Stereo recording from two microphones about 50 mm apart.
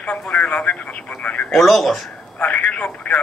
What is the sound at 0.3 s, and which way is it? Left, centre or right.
Speech, left.